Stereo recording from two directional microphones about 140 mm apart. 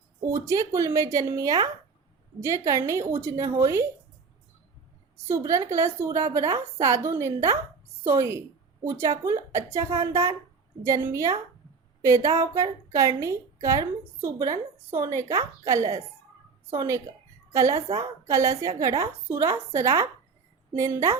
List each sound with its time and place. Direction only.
0.3 s a woman's voice: 20° right (ahead or behind)
5.1 s a woman's voice: 20° right (ahead or behind)
17.8 s a woman's voice: 45° right (ahead or behind)
18.3 s a woman's voice: 20° right (ahead or behind)